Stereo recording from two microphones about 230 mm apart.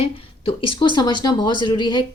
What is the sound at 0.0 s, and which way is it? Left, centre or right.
Speech, left.